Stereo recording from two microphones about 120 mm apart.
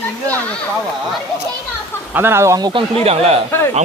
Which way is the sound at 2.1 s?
20° right (ahead or behind).